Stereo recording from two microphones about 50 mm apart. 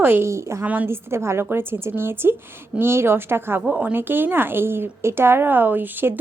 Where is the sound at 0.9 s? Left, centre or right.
Right.